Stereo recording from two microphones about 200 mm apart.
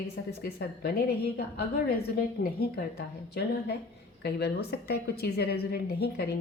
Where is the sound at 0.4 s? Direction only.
50° left (ahead or behind).